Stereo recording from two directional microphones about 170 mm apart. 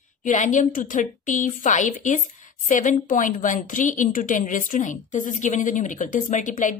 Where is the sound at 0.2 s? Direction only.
50° left (ahead or behind).